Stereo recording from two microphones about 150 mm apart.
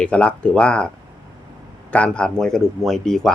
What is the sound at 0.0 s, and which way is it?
Speech, 10° left (ahead or behind).